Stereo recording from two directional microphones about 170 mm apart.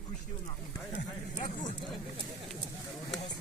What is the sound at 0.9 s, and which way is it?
Speech, 45° left (ahead or behind).